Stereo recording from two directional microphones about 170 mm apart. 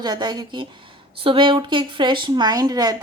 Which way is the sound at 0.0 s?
25° right (ahead or behind).